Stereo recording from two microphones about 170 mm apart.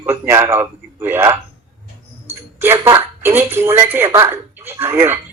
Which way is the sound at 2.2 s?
15° right (ahead or behind).